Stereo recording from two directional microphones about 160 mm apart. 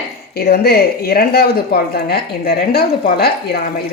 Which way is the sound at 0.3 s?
75° left (ahead or behind).